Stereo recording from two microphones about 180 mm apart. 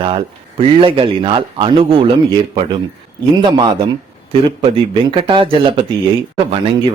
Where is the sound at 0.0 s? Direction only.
30° right (ahead or behind).